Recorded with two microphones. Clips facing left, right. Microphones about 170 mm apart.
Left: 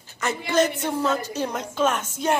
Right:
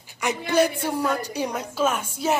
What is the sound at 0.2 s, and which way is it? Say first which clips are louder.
A woman's voice: right 1 dB; 15° right (ahead or behind).